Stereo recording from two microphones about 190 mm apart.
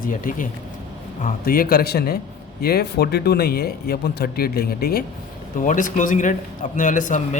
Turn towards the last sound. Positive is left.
turn(degrees=40)  # may be behind; listen again after turning